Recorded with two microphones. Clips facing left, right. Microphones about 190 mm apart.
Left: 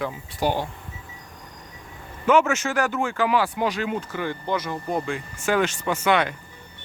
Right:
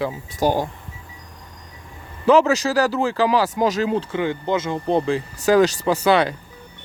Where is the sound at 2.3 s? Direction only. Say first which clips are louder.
Right 4 dB; 35° right (ahead or behind).